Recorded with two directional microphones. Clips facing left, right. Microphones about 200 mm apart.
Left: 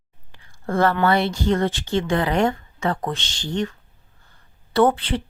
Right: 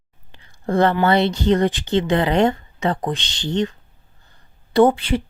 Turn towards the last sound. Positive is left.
turn(degrees=-10)  # may be behind; listen again after turning